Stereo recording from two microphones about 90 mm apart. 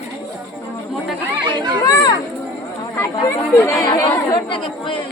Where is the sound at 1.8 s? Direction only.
45° left (ahead or behind).